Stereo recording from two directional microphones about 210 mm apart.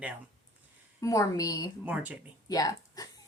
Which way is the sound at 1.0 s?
15° left (ahead or behind).